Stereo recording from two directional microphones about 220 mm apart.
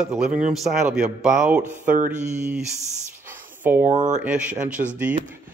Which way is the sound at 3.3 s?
10° right (ahead or behind).